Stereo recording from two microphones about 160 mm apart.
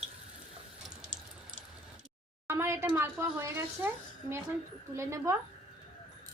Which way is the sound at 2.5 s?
15° right (ahead or behind).